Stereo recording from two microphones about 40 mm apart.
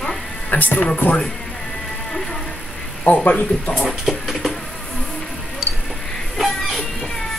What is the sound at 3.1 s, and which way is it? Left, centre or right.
Speech, left.